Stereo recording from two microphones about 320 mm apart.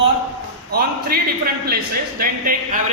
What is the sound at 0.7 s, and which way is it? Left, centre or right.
Speech, right.